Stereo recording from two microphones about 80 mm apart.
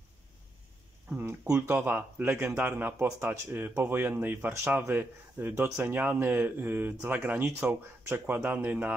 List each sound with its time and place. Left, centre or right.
1.4 s speech: right